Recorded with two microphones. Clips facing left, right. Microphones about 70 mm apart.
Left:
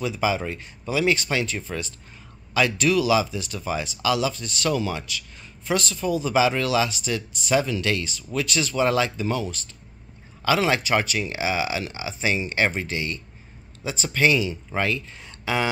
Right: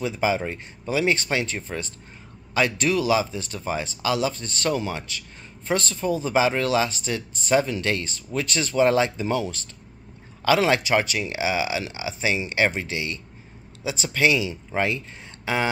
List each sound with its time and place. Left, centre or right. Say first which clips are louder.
0.0 s speech: right 1 dB; right
11.4 s speech: right 1 dB; left
14.5 s speech: right 1 dB; right